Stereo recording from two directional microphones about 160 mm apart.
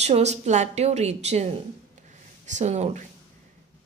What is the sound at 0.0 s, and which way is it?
Speech, 45° right (ahead or behind).